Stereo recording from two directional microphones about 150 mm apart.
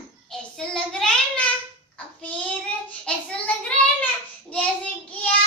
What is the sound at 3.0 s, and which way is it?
Child singing, 10° left (ahead or behind).